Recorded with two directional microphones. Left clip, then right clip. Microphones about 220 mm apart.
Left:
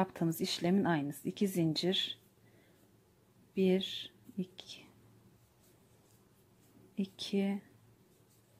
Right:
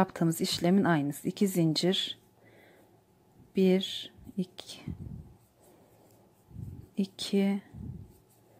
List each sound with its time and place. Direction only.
0.0 s speech: 15° right (ahead or behind)
3.5 s speech: 15° right (ahead or behind)
7.0 s speech: 15° right (ahead or behind)